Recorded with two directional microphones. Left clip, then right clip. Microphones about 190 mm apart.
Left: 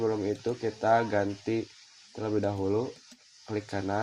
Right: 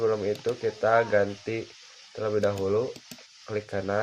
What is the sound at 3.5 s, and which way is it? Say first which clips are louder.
Speech: right 3 dB; 25° left (ahead or behind).